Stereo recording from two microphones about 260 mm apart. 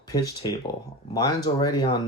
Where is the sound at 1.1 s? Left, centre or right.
Centre.